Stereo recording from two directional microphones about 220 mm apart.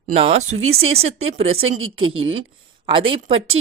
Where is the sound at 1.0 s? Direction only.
25° right (ahead or behind).